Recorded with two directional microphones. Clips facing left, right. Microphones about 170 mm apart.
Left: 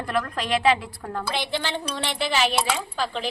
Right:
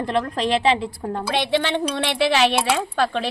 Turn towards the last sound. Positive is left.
turn(degrees=-70)  # may be behind; listen again after turning